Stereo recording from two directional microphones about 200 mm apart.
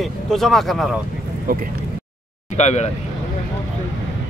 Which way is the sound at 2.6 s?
35° left (ahead or behind).